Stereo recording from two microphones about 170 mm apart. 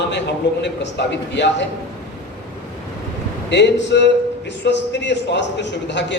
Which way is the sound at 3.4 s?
90° left.